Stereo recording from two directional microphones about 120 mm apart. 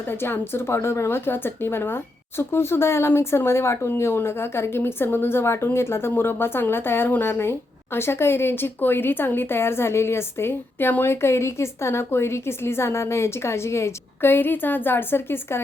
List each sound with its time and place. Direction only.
0.1 s speech: 20° left (ahead or behind)